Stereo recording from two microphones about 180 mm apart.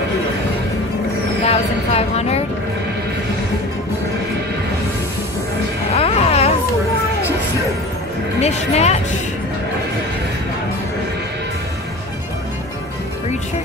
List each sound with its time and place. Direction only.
1.4 s vehicle: 35° left (ahead or behind)
5.9 s music: 35° left (ahead or behind)
8.4 s speech: 35° left (ahead or behind)